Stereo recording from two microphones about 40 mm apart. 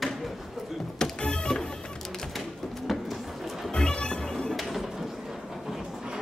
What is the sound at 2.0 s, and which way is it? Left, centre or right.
Music, centre.